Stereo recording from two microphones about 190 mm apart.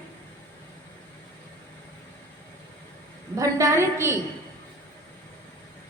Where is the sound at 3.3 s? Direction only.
15° right (ahead or behind).